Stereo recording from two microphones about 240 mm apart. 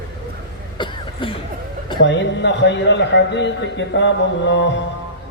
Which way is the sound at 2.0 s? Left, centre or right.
Left.